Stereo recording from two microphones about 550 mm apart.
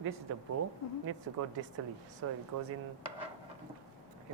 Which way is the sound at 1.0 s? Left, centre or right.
Right.